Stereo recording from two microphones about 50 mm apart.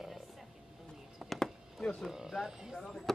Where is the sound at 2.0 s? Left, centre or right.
Centre.